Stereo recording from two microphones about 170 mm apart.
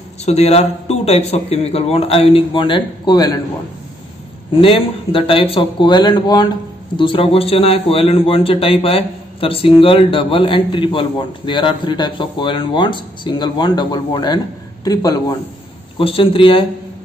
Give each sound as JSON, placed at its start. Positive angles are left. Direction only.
{"t": 0.2, "sound": "a man's voice", "side_deg": 40}
{"t": 4.6, "sound": "a man's voice", "side_deg": 30}
{"t": 16.0, "sound": "a man's voice", "side_deg": 30}